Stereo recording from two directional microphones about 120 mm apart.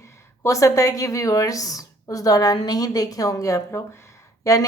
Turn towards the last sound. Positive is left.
turn(degrees=25)  # may be behind; listen again after turning